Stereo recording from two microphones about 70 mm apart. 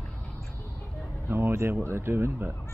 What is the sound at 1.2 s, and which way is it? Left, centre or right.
Speech, right.